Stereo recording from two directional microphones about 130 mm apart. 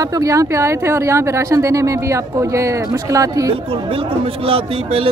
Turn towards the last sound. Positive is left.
turn(degrees=-45)  # may be behind; listen again after turning